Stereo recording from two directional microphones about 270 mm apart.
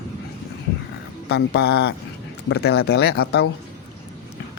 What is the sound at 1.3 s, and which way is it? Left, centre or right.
Speech, left.